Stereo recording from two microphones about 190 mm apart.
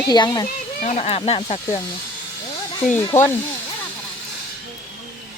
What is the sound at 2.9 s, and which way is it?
Speech, 15° left (ahead or behind).